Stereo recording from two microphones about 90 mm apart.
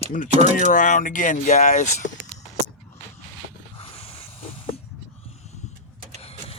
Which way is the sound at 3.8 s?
90° left.